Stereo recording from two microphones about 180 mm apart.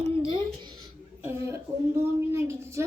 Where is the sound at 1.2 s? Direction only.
15° right (ahead or behind).